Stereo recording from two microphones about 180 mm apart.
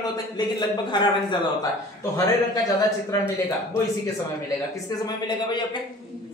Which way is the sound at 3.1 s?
20° left (ahead or behind).